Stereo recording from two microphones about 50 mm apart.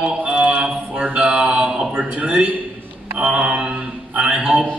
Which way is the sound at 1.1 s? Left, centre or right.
Right.